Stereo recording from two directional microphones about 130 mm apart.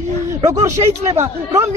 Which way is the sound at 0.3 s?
25° right (ahead or behind).